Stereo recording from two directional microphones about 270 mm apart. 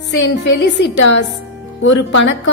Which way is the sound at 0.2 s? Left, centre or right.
Left.